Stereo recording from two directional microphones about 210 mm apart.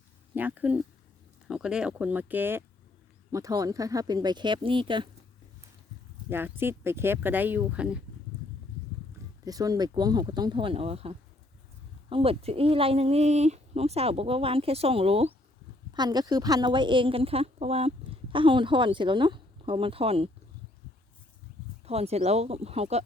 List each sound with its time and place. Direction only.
0.3 s a woman's voice: 10° right (ahead or behind); by 5.0 s 25° right (ahead or behind)
6.3 s speech: 10° right (ahead or behind)
9.4 s a woman's voice: 15° right (ahead or behind)
21.8 s a woman's voice: 30° right (ahead or behind)